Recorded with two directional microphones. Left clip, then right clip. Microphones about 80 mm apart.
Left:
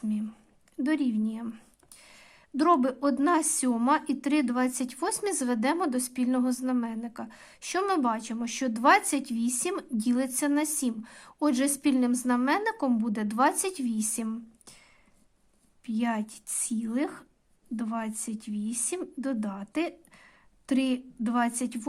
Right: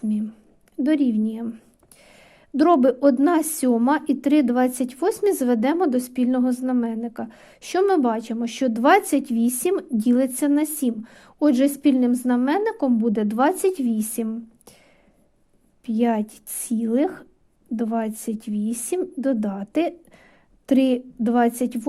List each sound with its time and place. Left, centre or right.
0.8 s a woman's voice: right
2.0 s a sound: right
3.2 s a woman's voice: right
4.9 s a woman's voice: right
6.8 s a woman's voice: right
15.9 s a woman's voice: right